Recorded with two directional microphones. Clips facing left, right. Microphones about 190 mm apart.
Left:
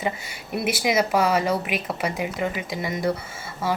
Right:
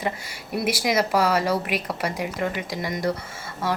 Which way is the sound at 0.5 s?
5° left (ahead or behind).